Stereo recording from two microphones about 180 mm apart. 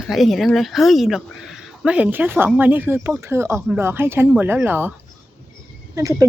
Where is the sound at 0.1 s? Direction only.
Centre (ahead or behind).